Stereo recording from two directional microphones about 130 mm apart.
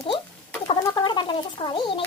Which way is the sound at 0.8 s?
35° left (ahead or behind).